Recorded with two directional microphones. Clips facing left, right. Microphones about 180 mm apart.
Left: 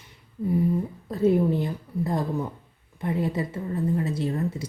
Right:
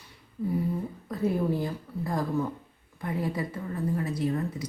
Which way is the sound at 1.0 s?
25° left (ahead or behind).